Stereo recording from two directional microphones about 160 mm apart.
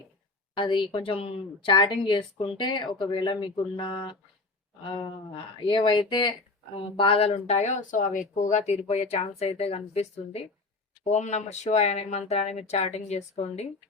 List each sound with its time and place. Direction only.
0.5 s a woman's voice: 30° left (ahead or behind)